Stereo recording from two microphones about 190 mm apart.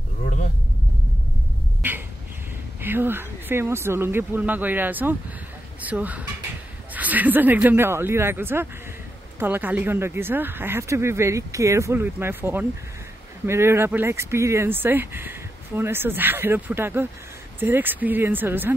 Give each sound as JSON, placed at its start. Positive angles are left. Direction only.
{"t": 1.8, "sound": "bird", "side_deg": -10}
{"t": 2.8, "sound": "speech", "side_deg": -10}